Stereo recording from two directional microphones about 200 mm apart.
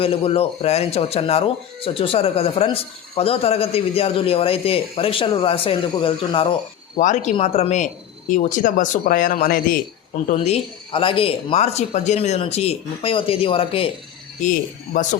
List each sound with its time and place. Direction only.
0.0 s speech: 30° left (ahead or behind)
6.9 s speech: 40° left (ahead or behind)
10.2 s speech: 30° left (ahead or behind)